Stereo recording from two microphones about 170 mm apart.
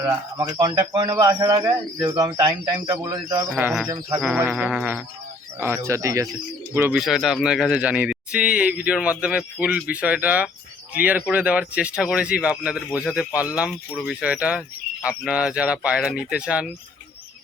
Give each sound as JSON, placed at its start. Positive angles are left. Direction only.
{"t": 0.0, "sound": "speech", "side_deg": -25}
{"t": 3.6, "sound": "speech", "side_deg": -10}
{"t": 3.8, "sound": "speech", "side_deg": -25}
{"t": 4.2, "sound": "speech", "side_deg": -10}